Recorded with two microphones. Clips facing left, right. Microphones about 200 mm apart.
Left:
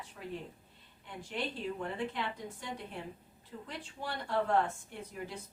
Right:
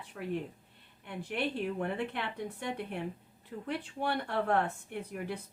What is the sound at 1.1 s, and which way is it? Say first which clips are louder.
A woman's voice: right 4 dB; 65° right (ahead or behind).